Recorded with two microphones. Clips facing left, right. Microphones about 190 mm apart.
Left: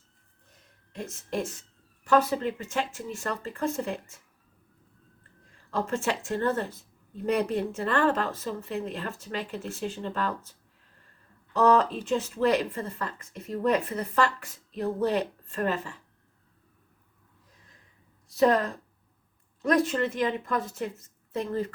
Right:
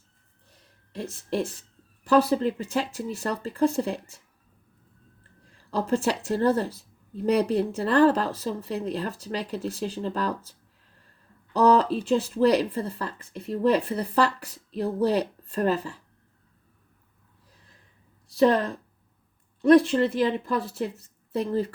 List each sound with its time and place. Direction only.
0.5 s a sound: 35° right (ahead or behind)
2.0 s speech: 35° right (ahead or behind)
5.5 s speech: 35° right (ahead or behind)
11.5 s speech: 35° right (ahead or behind)
18.4 s speech: 30° right (ahead or behind)